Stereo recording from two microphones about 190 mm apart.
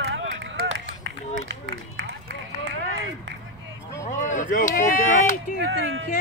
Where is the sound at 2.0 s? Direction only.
90° right.